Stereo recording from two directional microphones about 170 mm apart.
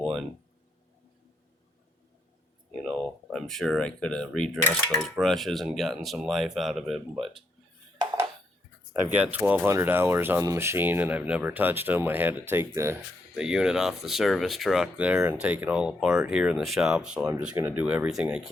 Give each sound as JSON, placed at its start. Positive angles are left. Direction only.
{"t": 0.0, "sound": "a sound", "side_deg": 0}
{"t": 2.8, "sound": "speech", "side_deg": 0}
{"t": 7.9, "sound": "dishes", "side_deg": -20}
{"t": 9.1, "sound": "speech", "side_deg": -10}
{"t": 13.3, "sound": "speech", "side_deg": -5}